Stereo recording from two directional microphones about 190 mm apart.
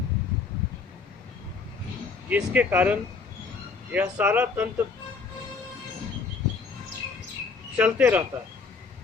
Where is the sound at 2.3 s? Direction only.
10° right (ahead or behind).